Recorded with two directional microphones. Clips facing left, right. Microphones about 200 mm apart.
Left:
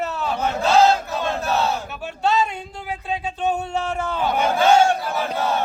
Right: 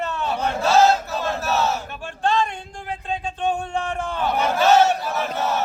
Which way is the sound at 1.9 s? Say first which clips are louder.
Left 1 dB; 5° left (ahead or behind).